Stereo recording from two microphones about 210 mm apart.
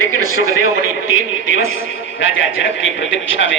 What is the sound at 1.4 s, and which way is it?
A man's voice, 70° left (ahead or behind).